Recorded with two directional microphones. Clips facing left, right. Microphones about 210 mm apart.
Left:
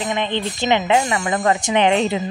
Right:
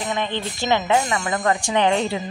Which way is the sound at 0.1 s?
20° left (ahead or behind).